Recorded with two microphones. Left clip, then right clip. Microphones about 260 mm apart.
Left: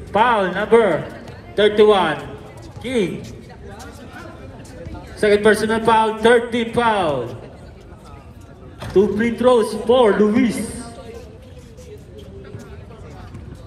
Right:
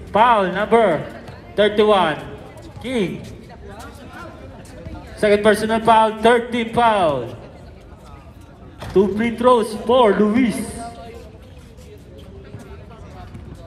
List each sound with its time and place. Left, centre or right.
0.1 s a man's voice: right
5.1 s a man's voice: right
8.7 s a man's voice: right